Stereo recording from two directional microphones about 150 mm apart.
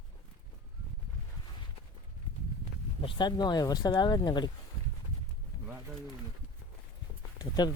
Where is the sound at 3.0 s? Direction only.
30° left (ahead or behind).